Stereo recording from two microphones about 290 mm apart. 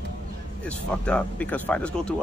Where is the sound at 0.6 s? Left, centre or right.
Centre.